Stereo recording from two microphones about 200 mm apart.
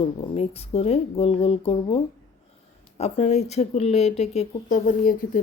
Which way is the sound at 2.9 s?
35° left (ahead or behind).